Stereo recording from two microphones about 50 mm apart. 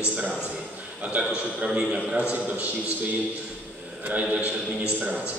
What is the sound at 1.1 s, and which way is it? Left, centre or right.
A man's voice, right.